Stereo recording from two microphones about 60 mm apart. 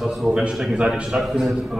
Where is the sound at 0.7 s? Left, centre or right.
Centre.